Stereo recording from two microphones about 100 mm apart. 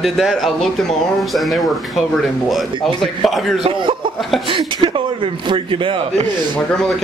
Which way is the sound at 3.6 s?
55° right (ahead or behind).